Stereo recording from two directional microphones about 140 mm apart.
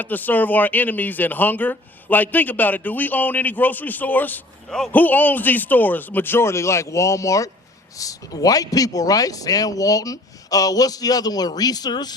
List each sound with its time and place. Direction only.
0.0 s speech: 10° left (ahead or behind); by 12.1 s 30° left (ahead or behind)